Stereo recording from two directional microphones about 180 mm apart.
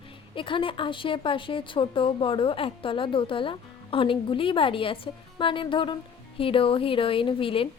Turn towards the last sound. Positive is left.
turn(degrees=30)  # may be behind; listen again after turning